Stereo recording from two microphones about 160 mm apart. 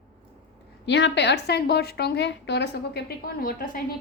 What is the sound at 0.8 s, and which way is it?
A woman's voice, 90° left.